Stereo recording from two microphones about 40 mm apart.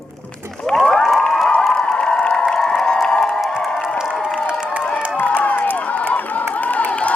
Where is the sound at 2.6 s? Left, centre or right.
Centre.